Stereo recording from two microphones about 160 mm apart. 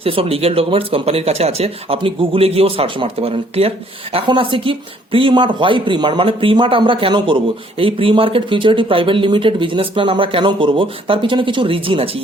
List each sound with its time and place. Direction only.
0.0 s speech: 35° right (ahead or behind)